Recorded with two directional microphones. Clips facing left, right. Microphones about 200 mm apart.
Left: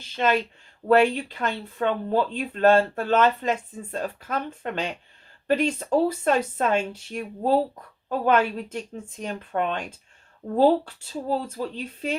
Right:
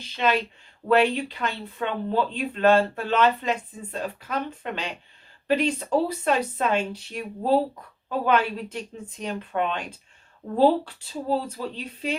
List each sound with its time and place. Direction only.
0.0 s speech: 45° left (ahead or behind)